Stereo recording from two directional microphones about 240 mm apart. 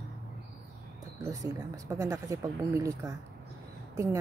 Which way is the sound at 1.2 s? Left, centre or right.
Centre.